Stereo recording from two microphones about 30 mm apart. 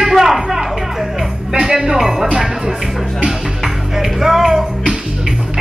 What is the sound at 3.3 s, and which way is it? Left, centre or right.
Music, centre.